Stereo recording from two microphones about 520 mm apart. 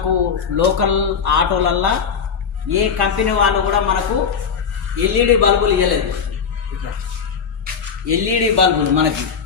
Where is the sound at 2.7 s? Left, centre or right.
Right.